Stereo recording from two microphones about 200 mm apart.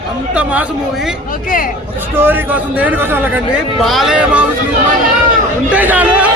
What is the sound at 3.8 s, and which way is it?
Speech, centre (ahead or behind).